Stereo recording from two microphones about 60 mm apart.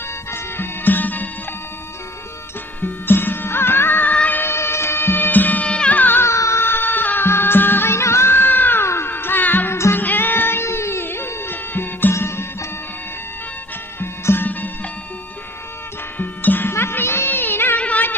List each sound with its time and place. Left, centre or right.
0.3 s music: left
2.8 s music: left
4.1 s music: left
4.4 s music: left
6.2 s music: left
6.7 s music: left
9.7 s music: left
10.0 s music: left
12.1 s music: left
14.0 s music: left
16.1 s music: left
17.7 s music: left